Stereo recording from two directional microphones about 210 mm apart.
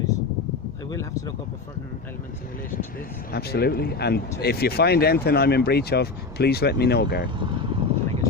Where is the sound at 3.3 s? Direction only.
50° left (ahead or behind).